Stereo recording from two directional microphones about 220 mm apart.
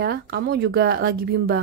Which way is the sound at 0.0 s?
45° right (ahead or behind).